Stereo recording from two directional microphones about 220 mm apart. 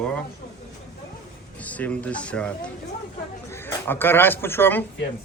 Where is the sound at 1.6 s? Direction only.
5° left (ahead or behind).